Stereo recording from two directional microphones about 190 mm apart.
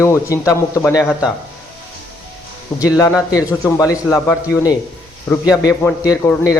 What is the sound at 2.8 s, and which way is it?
Speech, 15° left (ahead or behind).